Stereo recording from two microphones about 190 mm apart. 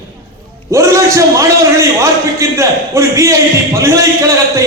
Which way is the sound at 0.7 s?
15° right (ahead or behind).